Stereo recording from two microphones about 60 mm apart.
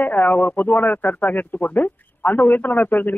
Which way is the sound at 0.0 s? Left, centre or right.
Left.